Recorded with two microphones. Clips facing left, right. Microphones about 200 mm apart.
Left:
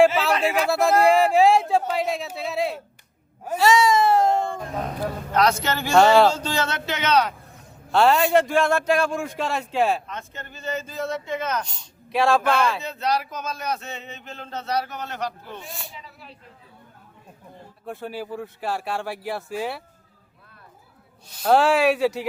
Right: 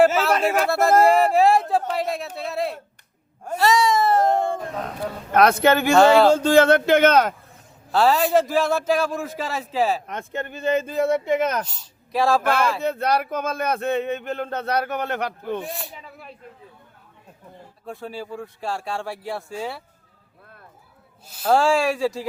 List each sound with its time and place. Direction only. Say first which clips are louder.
0.4 s speech: right 1 dB; centre (ahead or behind)
5.3 s speech: right 6 dB; 55° right (ahead or behind)
5.9 s a man's voice: even; centre (ahead or behind)
6.3 s speech: right 11 dB; 50° right (ahead or behind)
7.9 s a man's voice: even; centre (ahead or behind)
10.1 s speech: right 7 dB; 60° right (ahead or behind)
11.7 s speech: even; centre (ahead or behind)
12.8 s speech: right 4 dB; 55° right (ahead or behind)
15.6 s a man's voice: right 6 dB; centre (ahead or behind)
16.0 s a sound: right 2 dB; 50° right (ahead or behind)
17.8 s a man's voice: left 1 dB; centre (ahead or behind)
21.2 s a man's voice: even; 5° right (ahead or behind)